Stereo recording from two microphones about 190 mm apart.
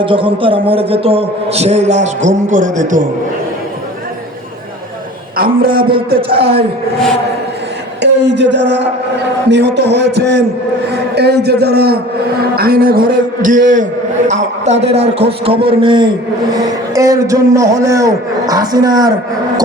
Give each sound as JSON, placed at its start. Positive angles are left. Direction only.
{"t": 0.0, "sound": "a man's voice", "side_deg": -25}
{"t": 5.4, "sound": "a man's voice", "side_deg": -50}
{"t": 8.0, "sound": "a man's voice", "side_deg": -65}